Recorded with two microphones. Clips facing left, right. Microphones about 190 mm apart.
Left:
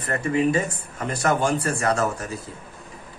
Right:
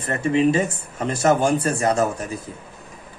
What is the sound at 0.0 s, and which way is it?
Speech, 25° right (ahead or behind).